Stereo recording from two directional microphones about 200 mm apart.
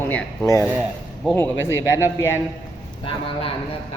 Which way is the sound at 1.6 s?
15° left (ahead or behind).